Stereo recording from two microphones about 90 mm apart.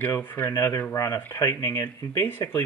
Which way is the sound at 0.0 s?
20° left (ahead or behind).